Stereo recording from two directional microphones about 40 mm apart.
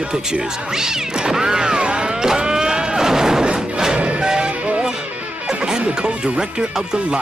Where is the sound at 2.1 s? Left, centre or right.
Centre.